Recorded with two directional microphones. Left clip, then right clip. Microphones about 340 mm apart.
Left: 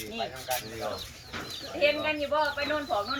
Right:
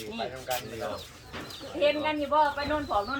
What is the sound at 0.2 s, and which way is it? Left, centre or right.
Speech, right.